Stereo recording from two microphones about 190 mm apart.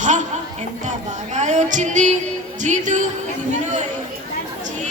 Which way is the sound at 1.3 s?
40° right (ahead or behind).